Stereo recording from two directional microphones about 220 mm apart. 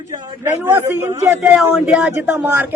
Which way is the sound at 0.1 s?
10° right (ahead or behind).